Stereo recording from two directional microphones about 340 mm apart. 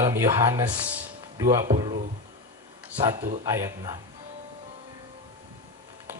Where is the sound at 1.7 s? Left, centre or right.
Right.